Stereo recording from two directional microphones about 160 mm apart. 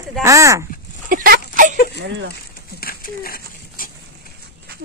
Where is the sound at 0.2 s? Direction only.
20° right (ahead or behind).